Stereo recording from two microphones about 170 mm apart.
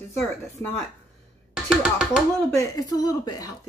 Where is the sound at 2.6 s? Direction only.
20° left (ahead or behind).